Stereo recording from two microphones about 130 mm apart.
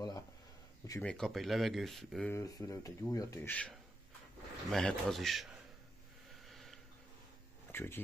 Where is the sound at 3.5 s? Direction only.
10° left (ahead or behind).